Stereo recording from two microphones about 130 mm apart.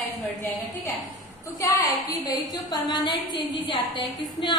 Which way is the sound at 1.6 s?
30° left (ahead or behind).